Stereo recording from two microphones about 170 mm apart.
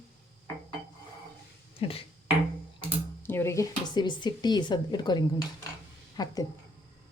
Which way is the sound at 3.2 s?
15° left (ahead or behind).